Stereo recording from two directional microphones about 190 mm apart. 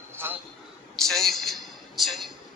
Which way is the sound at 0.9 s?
Centre (ahead or behind).